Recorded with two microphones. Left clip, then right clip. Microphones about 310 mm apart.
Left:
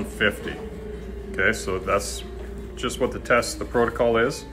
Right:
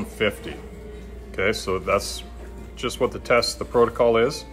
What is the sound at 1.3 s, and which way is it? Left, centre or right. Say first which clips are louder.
Speech: even; right.